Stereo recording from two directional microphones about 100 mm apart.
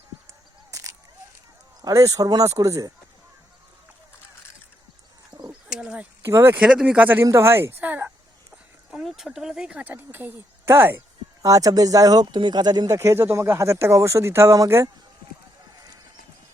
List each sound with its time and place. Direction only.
0.7 s single-lens reflex camera: 35° right (ahead or behind)
1.8 s speech: 35° right (ahead or behind)
5.3 s bird: 45° right (ahead or behind)
5.6 s bird: 10° right (ahead or behind)
6.2 s speech: 25° right (ahead or behind)
6.6 s speech: 10° right (ahead or behind)
7.3 s speech: 30° right (ahead or behind)
8.9 s speech: 5° right (ahead or behind); by 11.0 s 20° right (ahead or behind)
11.4 s speech: 35° right (ahead or behind)
12.2 s speech: 50° right (ahead or behind); by 14.8 s 30° right (ahead or behind)